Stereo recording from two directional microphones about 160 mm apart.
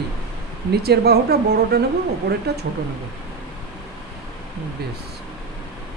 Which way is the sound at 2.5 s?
90° right.